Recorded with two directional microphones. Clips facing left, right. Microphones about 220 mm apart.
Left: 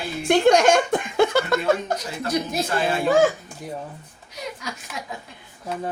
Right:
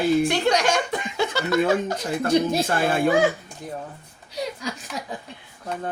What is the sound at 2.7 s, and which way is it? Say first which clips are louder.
Speech: right 1 dB; 50° right (ahead or behind).